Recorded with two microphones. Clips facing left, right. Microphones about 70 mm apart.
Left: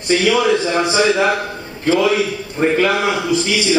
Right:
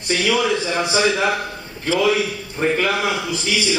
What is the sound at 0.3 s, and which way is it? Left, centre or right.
A man's voice, centre.